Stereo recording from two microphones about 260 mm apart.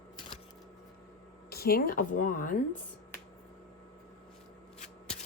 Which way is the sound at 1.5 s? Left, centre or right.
Left.